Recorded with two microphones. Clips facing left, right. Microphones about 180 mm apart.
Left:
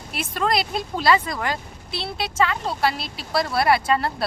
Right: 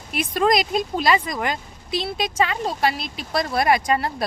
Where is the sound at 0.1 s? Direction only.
15° right (ahead or behind).